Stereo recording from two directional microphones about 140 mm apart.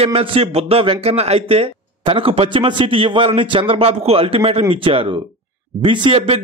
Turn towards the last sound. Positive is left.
turn(degrees=-40)  # may be behind; listen again after turning